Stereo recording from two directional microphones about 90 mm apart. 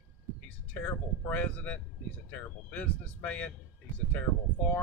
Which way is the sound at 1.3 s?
15° left (ahead or behind).